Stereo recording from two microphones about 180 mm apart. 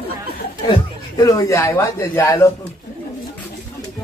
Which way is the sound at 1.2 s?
20° left (ahead or behind).